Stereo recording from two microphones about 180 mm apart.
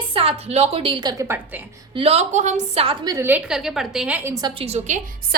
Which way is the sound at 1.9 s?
30° right (ahead or behind).